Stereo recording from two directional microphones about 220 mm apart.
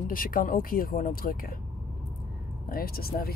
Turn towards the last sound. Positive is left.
turn(degrees=45)  # may be behind; listen again after turning